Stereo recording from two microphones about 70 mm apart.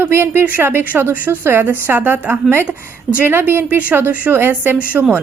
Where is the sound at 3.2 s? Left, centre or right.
Right.